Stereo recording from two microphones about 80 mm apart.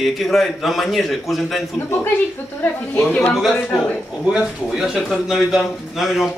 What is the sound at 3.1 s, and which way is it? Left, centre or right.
Speech, left.